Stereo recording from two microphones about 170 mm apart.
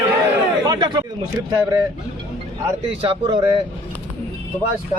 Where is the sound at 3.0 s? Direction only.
30° right (ahead or behind).